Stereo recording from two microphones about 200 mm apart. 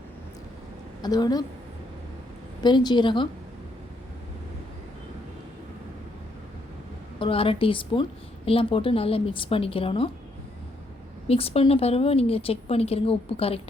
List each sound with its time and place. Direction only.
1.0 s speech: 20° left (ahead or behind)
2.6 s speech: 20° left (ahead or behind)
7.2 s speech: 25° left (ahead or behind)
11.3 s speech: 30° left (ahead or behind)